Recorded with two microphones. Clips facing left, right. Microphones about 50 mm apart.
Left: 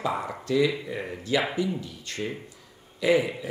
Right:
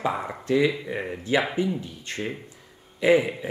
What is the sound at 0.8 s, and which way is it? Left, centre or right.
A man's voice, centre.